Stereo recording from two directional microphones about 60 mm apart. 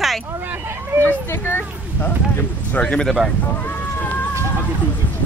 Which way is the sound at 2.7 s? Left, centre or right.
Centre.